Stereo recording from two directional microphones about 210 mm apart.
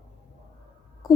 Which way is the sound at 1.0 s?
15° left (ahead or behind).